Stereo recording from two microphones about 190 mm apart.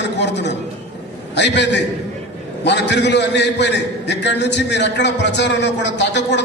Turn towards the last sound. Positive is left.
turn(degrees=65)  # may be behind; listen again after turning